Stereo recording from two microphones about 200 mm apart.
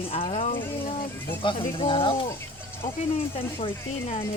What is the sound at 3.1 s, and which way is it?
Speech, 25° left (ahead or behind).